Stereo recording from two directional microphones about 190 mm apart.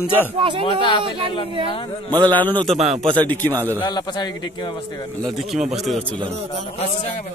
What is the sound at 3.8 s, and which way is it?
Speech, 20° left (ahead or behind).